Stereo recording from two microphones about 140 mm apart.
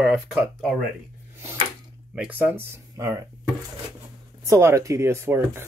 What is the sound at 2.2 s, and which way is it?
Speech, 10° right (ahead or behind).